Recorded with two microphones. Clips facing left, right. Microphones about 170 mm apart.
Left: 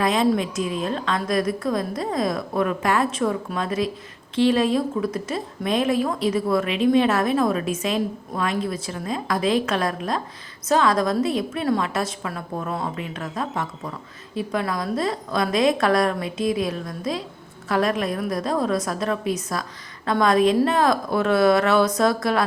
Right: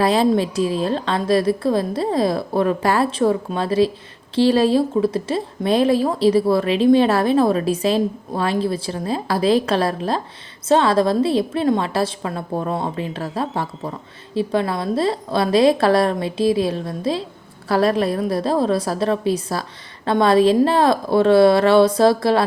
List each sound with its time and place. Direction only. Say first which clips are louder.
0.0 s a woman's voice: right 4 dB; 35° right (ahead or behind)